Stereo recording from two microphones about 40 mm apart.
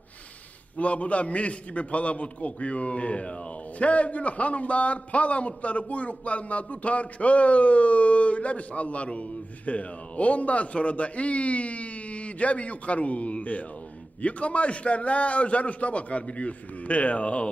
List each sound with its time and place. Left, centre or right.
0.8 s a man's voice: left